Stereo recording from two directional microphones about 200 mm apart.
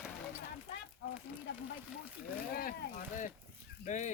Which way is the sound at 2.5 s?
45° left (ahead or behind).